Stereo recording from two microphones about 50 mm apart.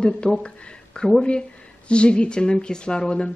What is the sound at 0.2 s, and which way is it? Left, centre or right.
A woman's voice, centre.